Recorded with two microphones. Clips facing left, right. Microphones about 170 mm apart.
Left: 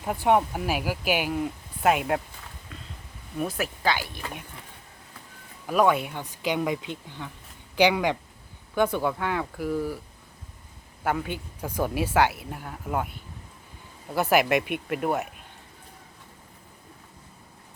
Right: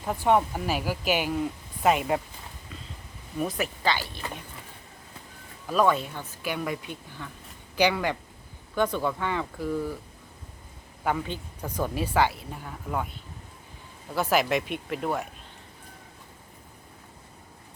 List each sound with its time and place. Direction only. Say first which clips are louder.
0.0 s speech: left 1 dB; 10° left (ahead or behind)
3.3 s speech: even; 5° left (ahead or behind)
5.6 s speech: left 1 dB; 10° left (ahead or behind)
11.0 s speech: left 1 dB; 5° left (ahead or behind)
14.3 s speech: left 3 dB; 55° left (ahead or behind)
14.8 s speech: left 3 dB; 5° left (ahead or behind)